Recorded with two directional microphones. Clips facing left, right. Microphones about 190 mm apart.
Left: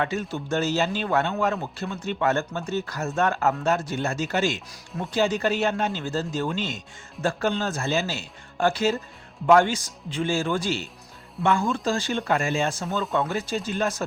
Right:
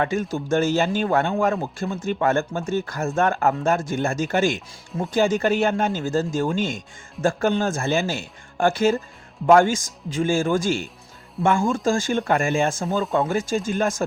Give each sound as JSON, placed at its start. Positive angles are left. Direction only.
{"t": 0.0, "sound": "speech", "side_deg": -45}